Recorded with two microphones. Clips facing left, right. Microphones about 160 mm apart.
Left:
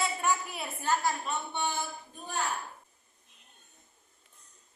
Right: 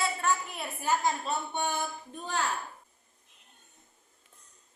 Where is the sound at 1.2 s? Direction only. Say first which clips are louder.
Right 2 dB; 45° right (ahead or behind).